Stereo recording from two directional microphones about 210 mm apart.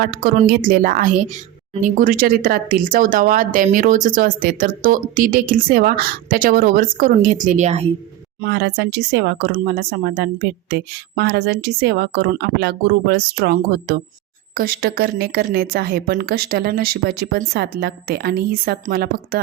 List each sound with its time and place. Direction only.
0.0 s speech: 45° right (ahead or behind)
8.4 s speech: 55° right (ahead or behind)